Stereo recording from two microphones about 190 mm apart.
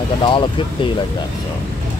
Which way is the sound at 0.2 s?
25° left (ahead or behind).